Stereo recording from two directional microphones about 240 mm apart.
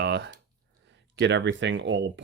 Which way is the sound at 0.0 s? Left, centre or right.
Right.